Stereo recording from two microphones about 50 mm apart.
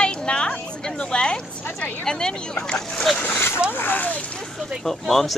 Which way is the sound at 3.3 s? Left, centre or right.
Left.